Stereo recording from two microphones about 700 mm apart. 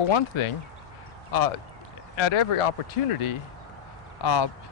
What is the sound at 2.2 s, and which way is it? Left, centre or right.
Speech, left.